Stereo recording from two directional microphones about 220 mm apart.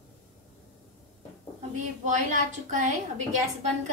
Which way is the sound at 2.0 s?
35° right (ahead or behind).